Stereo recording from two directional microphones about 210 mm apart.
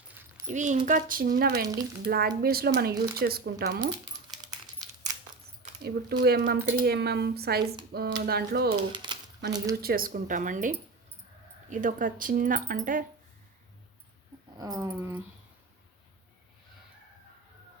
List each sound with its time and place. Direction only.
0.4 s speech: 35° right (ahead or behind)
1.6 s dog: 15° right (ahead or behind)
2.0 s speech: 45° right (ahead or behind)
5.8 s speech: 50° right (ahead or behind)
8.7 s speech: 20° right (ahead or behind)
9.8 s speech: 45° right (ahead or behind)
14.6 s dog: 15° right (ahead or behind)